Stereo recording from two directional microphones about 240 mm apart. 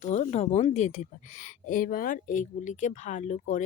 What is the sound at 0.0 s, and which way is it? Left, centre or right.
Speech, left.